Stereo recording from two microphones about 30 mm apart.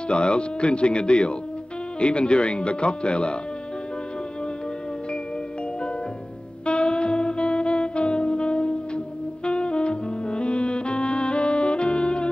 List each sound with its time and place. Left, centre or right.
0.1 s speech: left
6.6 s music: left